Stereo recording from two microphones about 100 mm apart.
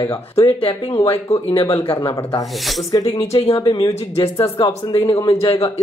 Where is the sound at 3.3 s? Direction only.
75° left (ahead or behind).